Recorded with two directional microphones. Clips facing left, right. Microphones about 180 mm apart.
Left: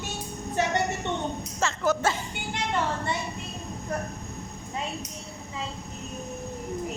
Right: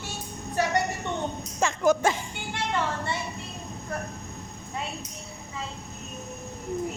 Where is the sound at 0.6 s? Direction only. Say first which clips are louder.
Even; 20° left (ahead or behind).